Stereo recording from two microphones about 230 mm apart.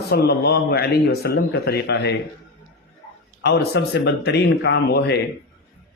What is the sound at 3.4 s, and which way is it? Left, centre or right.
A man's voice, left.